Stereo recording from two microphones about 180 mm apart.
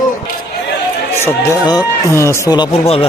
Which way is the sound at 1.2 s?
20° left (ahead or behind).